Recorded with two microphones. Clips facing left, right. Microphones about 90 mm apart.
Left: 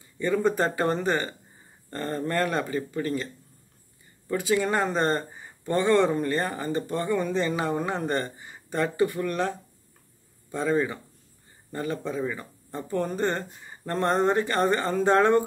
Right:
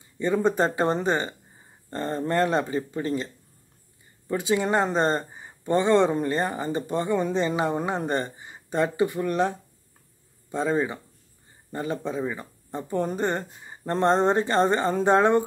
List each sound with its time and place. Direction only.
0.2 s speech: 20° right (ahead or behind)
4.3 s speech: 20° right (ahead or behind)